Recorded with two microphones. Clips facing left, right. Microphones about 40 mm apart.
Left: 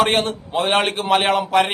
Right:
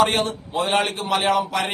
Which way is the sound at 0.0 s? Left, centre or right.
Left.